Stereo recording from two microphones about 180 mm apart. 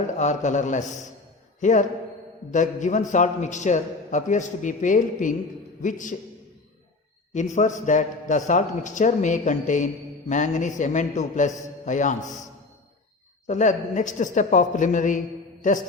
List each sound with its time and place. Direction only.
0.1 s a man's voice: 40° left (ahead or behind)
7.3 s a man's voice: 40° left (ahead or behind)
13.5 s a man's voice: 40° left (ahead or behind)